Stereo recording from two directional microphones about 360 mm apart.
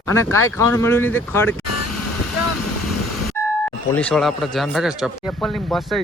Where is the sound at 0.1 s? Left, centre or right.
Centre.